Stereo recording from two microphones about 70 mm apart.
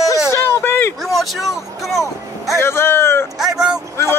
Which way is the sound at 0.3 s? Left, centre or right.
Left.